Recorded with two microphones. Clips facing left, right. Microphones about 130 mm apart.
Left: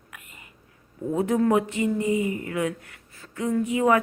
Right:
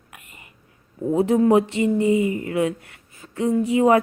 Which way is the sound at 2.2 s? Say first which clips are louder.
Right 5 dB; 25° right (ahead or behind).